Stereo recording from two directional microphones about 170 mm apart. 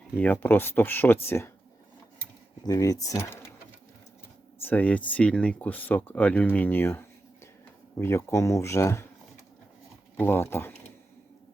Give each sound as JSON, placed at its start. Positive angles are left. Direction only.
{"t": 0.2, "sound": "speech", "side_deg": 10}
{"t": 2.6, "sound": "speech", "side_deg": 20}
{"t": 4.6, "sound": "speech", "side_deg": 10}
{"t": 10.2, "sound": "speech", "side_deg": 15}